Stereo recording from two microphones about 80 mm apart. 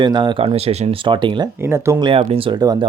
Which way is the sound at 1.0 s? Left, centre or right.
Right.